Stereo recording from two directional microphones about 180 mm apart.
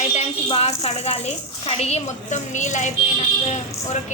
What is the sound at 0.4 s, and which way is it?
Speech, 30° left (ahead or behind).